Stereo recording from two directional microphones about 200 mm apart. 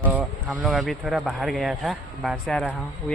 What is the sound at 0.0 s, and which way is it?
Speech, 10° right (ahead or behind).